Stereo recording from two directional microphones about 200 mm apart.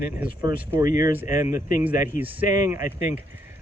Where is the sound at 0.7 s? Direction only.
15° right (ahead or behind).